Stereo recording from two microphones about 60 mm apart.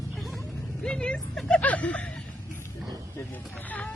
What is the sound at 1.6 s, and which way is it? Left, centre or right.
Snicker, left.